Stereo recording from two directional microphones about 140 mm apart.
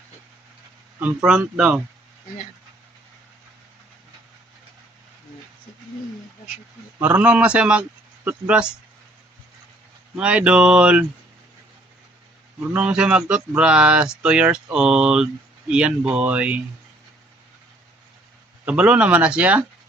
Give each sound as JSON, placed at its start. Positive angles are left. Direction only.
{"t": 0.9, "sound": "speech", "side_deg": -10}
{"t": 7.0, "sound": "speech", "side_deg": -10}
{"t": 10.2, "sound": "speech", "side_deg": -10}
{"t": 12.7, "sound": "speech", "side_deg": -5}
{"t": 18.6, "sound": "speech", "side_deg": -10}